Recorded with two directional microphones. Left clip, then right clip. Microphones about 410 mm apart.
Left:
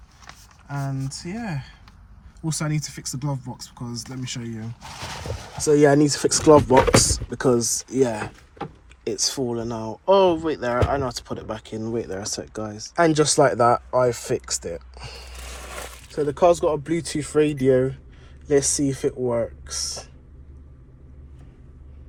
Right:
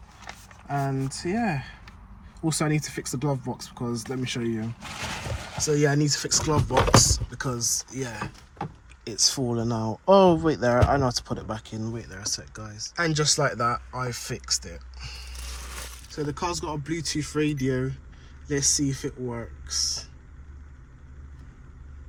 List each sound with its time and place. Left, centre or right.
0.7 s speech: centre
16.3 s speech: centre
17.7 s speech: left
18.6 s speech: centre